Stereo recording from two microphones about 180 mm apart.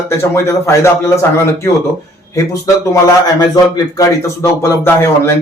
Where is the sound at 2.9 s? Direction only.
20° left (ahead or behind).